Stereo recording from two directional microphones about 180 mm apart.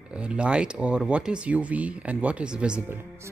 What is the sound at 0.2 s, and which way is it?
Speech, 5° right (ahead or behind).